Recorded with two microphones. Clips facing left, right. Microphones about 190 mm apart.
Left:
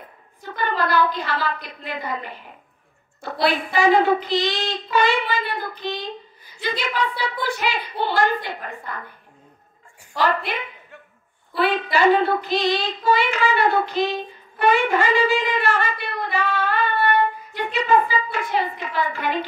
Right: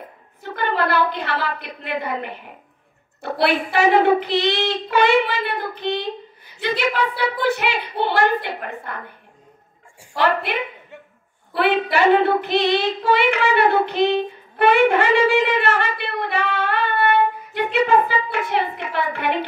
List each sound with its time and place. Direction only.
0.4 s a woman's voice: 60° right (ahead or behind)
10.1 s speech: 60° right (ahead or behind)
11.5 s speech: 60° right (ahead or behind)
14.6 s shofar: 60° right (ahead or behind)
17.6 s speech: 60° right (ahead or behind)